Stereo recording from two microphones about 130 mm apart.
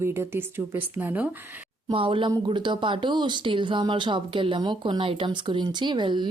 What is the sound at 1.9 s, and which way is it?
Speech, 40° right (ahead or behind).